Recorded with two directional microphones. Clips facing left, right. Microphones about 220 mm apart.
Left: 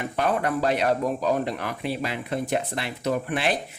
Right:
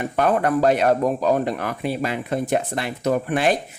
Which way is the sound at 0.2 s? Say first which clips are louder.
Right 5 dB; 50° right (ahead or behind).